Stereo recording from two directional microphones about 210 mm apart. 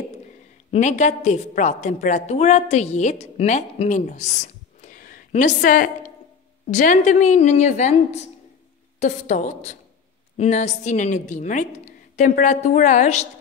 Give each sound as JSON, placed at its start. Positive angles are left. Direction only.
{"t": 0.7, "sound": "a woman's voice", "side_deg": 35}